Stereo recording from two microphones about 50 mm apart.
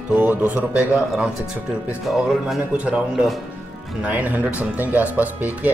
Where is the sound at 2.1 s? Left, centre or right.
Centre.